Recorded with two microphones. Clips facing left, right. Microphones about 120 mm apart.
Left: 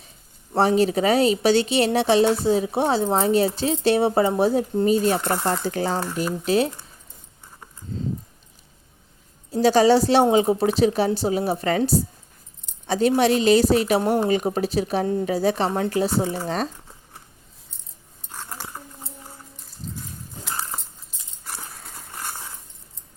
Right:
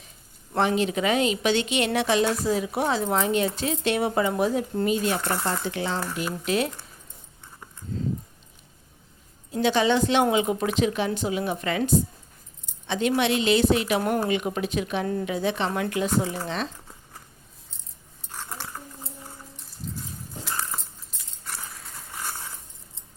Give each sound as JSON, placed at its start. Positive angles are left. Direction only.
{"t": 0.5, "sound": "speech", "side_deg": 35}
{"t": 5.6, "sound": "speech", "side_deg": 40}
{"t": 9.5, "sound": "speech", "side_deg": 35}
{"t": 14.0, "sound": "speech", "side_deg": 25}
{"t": 14.3, "sound": "speech", "side_deg": 35}
{"t": 18.3, "sound": "a sound", "side_deg": 10}